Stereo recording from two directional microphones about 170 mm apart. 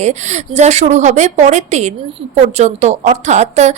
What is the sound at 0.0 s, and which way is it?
A woman's voice, 40° right (ahead or behind).